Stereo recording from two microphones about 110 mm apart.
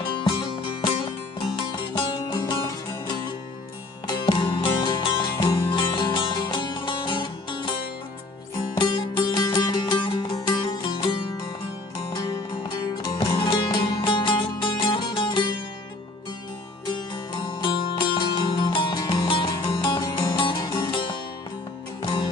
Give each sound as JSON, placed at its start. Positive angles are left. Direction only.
{"t": 0.0, "sound": "music", "side_deg": 50}
{"t": 4.1, "sound": "music", "side_deg": 45}
{"t": 8.8, "sound": "music", "side_deg": 50}
{"t": 13.3, "sound": "music", "side_deg": 50}
{"t": 17.4, "sound": "music", "side_deg": 45}
{"t": 20.0, "sound": "music", "side_deg": 35}